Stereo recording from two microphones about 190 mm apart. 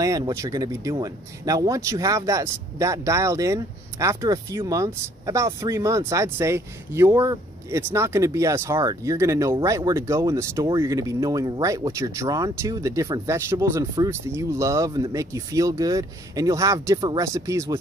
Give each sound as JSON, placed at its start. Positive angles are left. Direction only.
{"t": 0.0, "sound": "speech", "side_deg": -15}